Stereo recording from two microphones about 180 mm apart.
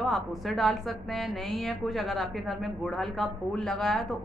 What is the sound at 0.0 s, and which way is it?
A woman's voice, centre (ahead or behind).